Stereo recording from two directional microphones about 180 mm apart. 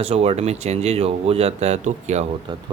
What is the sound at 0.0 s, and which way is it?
Speech, 35° right (ahead or behind).